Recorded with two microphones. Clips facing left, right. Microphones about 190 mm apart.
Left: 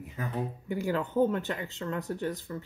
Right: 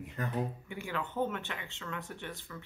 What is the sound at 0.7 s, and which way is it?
Speech, 40° left (ahead or behind).